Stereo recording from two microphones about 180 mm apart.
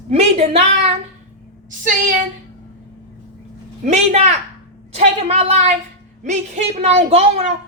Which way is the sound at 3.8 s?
40° right (ahead or behind).